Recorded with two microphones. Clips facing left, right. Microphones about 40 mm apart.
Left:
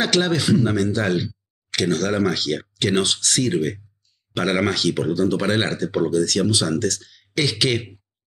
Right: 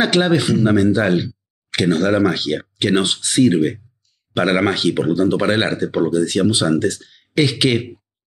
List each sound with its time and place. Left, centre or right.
0.0 s speech: centre